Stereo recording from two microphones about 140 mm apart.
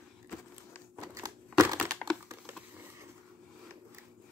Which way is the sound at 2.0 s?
10° left (ahead or behind).